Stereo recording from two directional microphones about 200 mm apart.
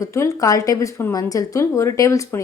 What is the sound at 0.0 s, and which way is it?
Speech, 15° left (ahead or behind).